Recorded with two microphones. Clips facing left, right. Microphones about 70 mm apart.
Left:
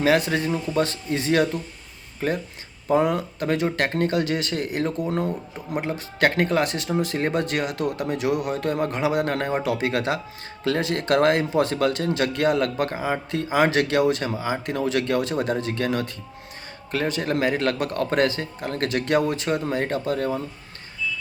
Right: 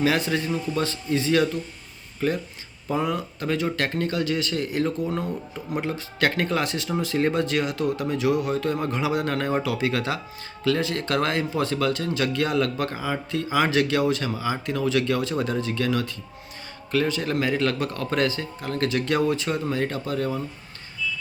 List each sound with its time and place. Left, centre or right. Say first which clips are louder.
0.0 s speech: left 3 dB; left
3.0 s speech: left 4 dB; left
4.1 s speech: left 1 dB; left
9.6 s speech: left 2 dB; left
15.5 s speech: even; left